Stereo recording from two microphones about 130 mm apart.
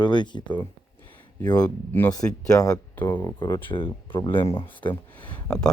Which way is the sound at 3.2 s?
35° left (ahead or behind).